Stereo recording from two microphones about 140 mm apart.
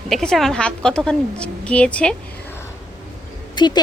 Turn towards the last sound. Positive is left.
turn(degrees=30)  # may be behind; listen again after turning